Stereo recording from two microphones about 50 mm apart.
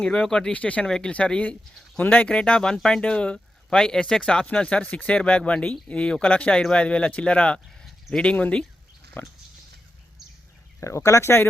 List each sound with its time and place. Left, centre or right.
0.0 s speech: centre
0.5 s speech: left
0.9 s speech: centre
2.0 s speech: left
2.2 s speech: left
9.2 s pig: left
10.8 s speech: left